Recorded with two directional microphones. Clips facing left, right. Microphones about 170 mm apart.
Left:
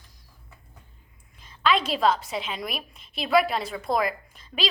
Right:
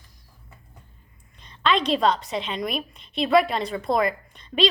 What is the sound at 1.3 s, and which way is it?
A woman's voice, 5° left (ahead or behind).